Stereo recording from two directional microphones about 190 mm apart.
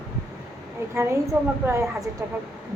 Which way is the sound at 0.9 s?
15° right (ahead or behind).